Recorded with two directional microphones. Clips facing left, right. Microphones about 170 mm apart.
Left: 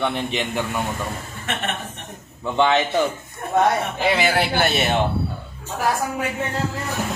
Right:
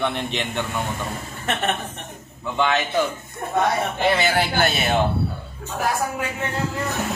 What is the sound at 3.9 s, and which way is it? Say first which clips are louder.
Speech: even; 5° left (ahead or behind).